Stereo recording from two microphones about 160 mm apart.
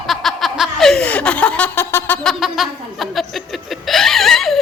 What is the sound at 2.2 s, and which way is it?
Chuckle, centre (ahead or behind).